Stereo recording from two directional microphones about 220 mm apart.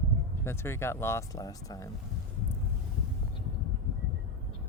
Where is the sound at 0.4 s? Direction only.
10° left (ahead or behind).